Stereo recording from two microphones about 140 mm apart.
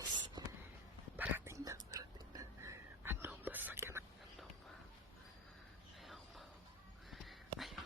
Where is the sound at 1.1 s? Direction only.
15° right (ahead or behind).